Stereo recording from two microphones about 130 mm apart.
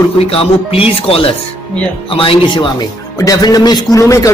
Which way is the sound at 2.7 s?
30° left (ahead or behind).